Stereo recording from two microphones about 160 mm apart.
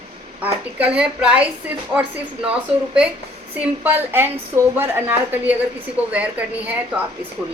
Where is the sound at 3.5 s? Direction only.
10° right (ahead or behind).